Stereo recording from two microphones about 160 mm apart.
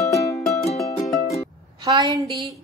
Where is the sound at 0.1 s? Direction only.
20° left (ahead or behind).